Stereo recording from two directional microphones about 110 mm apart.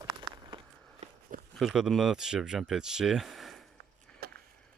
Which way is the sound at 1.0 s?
80° right.